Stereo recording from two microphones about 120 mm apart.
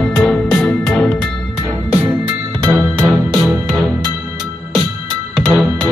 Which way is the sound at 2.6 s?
25° right (ahead or behind).